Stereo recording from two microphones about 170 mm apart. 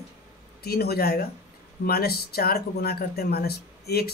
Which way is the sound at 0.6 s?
65° left (ahead or behind).